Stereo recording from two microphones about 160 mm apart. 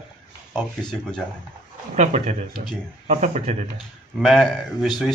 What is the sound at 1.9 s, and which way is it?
Speech, 45° right (ahead or behind).